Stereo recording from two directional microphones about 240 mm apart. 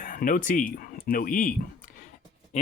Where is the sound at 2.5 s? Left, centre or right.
Left.